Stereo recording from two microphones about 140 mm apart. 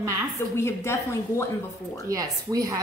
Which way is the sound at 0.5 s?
20° left (ahead or behind).